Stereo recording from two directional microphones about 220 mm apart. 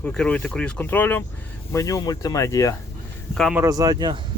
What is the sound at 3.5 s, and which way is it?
Speech, 15° right (ahead or behind).